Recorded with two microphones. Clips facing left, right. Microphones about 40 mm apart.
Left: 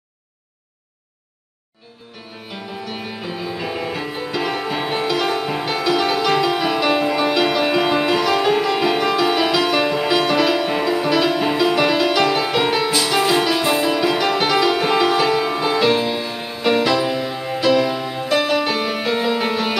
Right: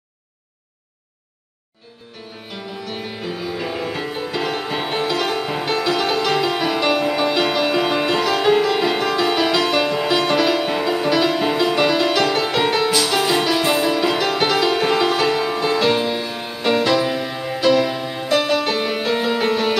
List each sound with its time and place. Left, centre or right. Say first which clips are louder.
2.9 s music: right 2 dB; centre
12.9 s music: even; centre
13.3 s music: even; centre